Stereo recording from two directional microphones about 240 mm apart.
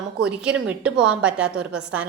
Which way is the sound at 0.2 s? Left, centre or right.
Centre.